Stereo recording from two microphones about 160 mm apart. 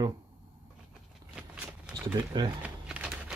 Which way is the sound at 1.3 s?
5° right (ahead or behind).